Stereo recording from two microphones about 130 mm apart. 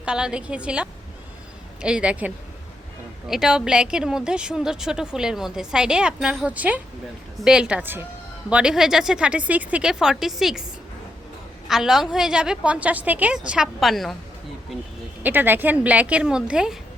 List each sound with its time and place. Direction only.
0.0 s a woman's voice: 5° right (ahead or behind)
11.7 s a woman's voice: 5° right (ahead or behind)
15.2 s a woman's voice: 15° right (ahead or behind)